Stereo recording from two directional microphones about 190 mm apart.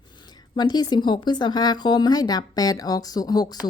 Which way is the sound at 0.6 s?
20° left (ahead or behind).